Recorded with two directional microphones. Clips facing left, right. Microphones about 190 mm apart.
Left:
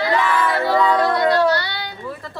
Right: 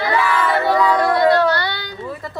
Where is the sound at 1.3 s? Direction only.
55° right (ahead or behind).